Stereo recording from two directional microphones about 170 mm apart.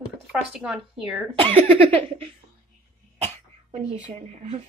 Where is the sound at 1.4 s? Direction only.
35° right (ahead or behind).